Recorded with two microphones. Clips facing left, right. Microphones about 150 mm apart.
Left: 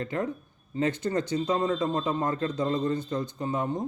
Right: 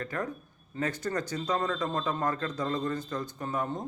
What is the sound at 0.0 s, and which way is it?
A man's voice, 25° left (ahead or behind).